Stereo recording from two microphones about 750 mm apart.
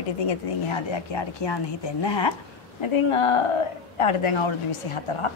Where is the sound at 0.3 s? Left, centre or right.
Left.